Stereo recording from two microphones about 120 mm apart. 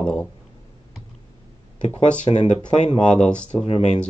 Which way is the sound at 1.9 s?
70° left (ahead or behind).